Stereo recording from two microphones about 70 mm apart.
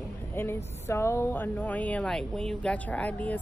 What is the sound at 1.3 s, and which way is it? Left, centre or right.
Speech, left.